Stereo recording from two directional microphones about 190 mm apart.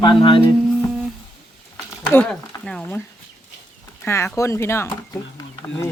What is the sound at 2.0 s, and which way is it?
Speech, 5° left (ahead or behind).